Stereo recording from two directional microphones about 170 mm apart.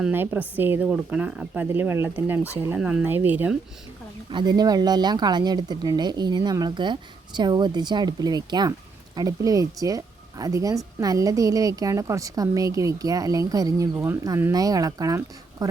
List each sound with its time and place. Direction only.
0.0 s speech: 10° right (ahead or behind)
4.3 s speech: 25° right (ahead or behind)